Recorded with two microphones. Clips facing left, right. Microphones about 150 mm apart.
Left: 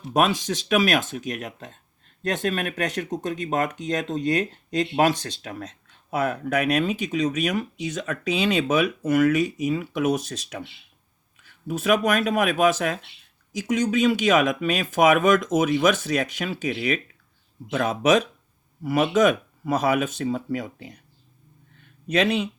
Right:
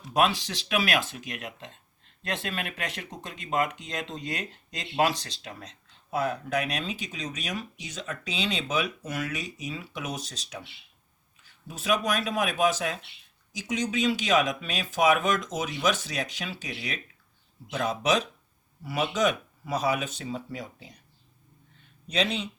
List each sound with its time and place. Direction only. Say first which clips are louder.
0.1 s speech: left 3 dB; 45° left (ahead or behind)
22.0 s speech: left 7 dB; 55° left (ahead or behind)